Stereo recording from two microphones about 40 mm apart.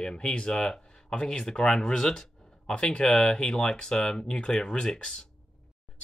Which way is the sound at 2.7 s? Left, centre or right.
Left.